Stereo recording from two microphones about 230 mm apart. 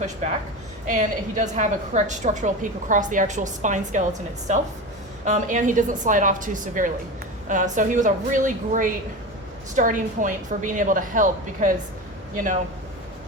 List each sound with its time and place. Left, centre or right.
0.9 s a woman's voice: right